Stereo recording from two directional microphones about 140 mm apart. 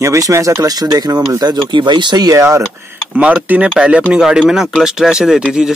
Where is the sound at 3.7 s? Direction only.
10° right (ahead or behind).